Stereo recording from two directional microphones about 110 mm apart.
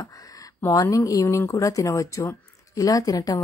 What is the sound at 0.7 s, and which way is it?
Speech, 30° left (ahead or behind).